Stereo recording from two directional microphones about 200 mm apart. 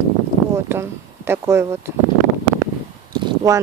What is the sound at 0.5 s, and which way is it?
Speech, 10° right (ahead or behind).